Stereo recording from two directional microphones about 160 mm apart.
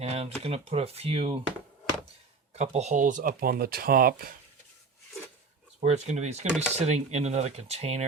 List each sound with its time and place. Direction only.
0.0 s speech: 40° right (ahead or behind)
2.5 s speech: 45° right (ahead or behind); by 4.4 s 65° right (ahead or behind)
5.8 s speech: 45° right (ahead or behind)